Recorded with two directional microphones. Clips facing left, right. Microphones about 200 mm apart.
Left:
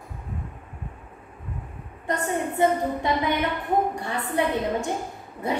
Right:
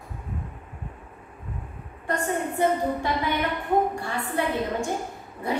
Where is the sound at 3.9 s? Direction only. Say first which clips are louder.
Left 2 dB; 20° left (ahead or behind).